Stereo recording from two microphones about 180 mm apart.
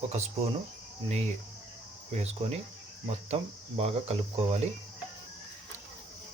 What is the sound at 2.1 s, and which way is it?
Speech, 35° right (ahead or behind).